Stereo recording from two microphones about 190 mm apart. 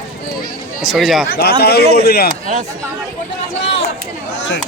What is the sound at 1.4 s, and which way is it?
Speech, 55° left (ahead or behind).